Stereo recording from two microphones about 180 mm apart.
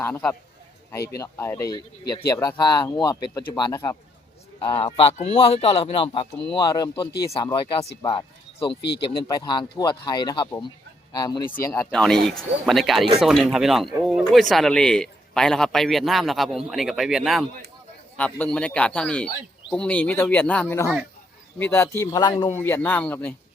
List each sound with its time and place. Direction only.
0.0 s speech: 5° left (ahead or behind); by 8.8 s 30° left (ahead or behind)
9.2 s speech: 20° left (ahead or behind)
11.9 s a man's voice: 5° left (ahead or behind); by 22.4 s 25° left (ahead or behind)
22.4 s speech: 15° left (ahead or behind)